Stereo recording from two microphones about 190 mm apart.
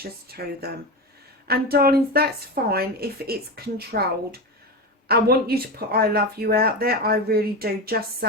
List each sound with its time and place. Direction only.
0.0 s speech: 55° right (ahead or behind)